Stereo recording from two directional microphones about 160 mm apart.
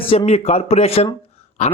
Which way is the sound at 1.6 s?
45° left (ahead or behind).